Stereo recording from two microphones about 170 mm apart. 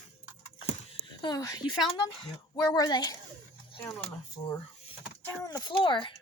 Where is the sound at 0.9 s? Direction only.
25° left (ahead or behind).